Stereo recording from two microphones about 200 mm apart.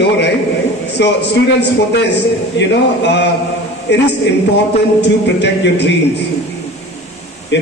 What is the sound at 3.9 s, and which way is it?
Speech, 60° left (ahead or behind).